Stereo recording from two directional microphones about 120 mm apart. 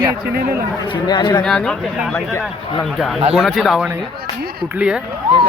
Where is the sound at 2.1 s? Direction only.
20° left (ahead or behind).